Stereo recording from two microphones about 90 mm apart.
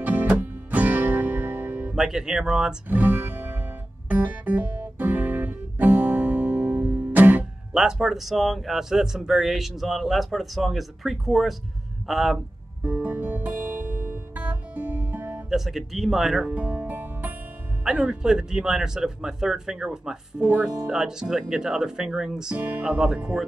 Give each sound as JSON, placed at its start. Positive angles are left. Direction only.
{"t": 0.0, "sound": "music", "side_deg": -20}
{"t": 2.0, "sound": "speech", "side_deg": -5}
{"t": 2.9, "sound": "music", "side_deg": -20}
{"t": 4.1, "sound": "guitar", "side_deg": -20}
{"t": 7.7, "sound": "speech", "side_deg": -5}
{"t": 12.8, "sound": "music", "side_deg": -20}
{"t": 15.5, "sound": "speech", "side_deg": -5}
{"t": 16.5, "sound": "music", "side_deg": -15}
{"t": 17.9, "sound": "speech", "side_deg": -10}
{"t": 22.6, "sound": "speech", "side_deg": -20}